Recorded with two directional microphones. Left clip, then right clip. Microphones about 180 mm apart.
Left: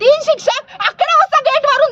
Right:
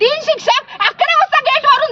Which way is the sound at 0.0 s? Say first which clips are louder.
Left 2 dB; 15° left (ahead or behind).